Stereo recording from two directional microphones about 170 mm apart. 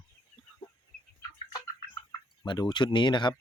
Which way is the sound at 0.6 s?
30° left (ahead or behind).